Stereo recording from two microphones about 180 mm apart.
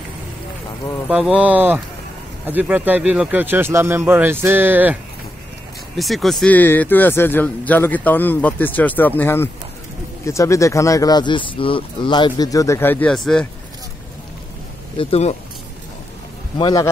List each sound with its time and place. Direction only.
1.0 s speech: 5° right (ahead or behind)
5.9 s speech: centre (ahead or behind)
15.0 s speech: 35° left (ahead or behind)
16.5 s a man's voice: 25° left (ahead or behind)